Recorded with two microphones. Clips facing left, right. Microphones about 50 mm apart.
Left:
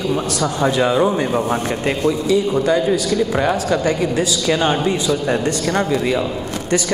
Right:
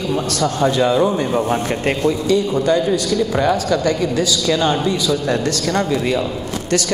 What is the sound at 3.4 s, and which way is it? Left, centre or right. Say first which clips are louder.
A man's voice: right 1 dB; left.